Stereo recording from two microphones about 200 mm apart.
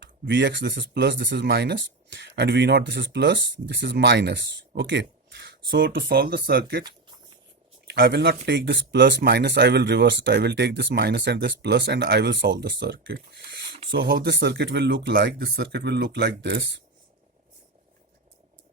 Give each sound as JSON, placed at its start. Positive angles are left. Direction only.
{"t": 0.0, "sound": "speech", "side_deg": -60}
{"t": 7.9, "sound": "speech", "side_deg": -60}